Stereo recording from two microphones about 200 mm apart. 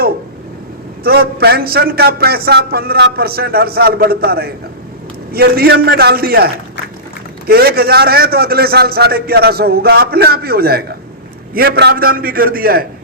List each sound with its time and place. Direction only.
1.0 s speech: 50° right (ahead or behind)